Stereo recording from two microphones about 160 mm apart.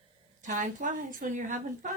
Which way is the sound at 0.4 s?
50° right (ahead or behind).